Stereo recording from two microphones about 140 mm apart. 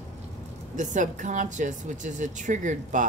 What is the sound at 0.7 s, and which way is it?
Speech, 60° right (ahead or behind).